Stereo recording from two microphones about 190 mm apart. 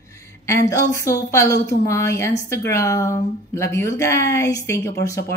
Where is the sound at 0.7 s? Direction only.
15° left (ahead or behind).